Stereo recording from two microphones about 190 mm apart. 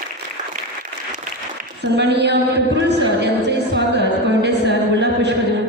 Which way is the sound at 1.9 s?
65° right (ahead or behind).